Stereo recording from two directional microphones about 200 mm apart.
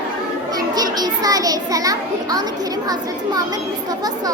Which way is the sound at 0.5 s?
20° right (ahead or behind).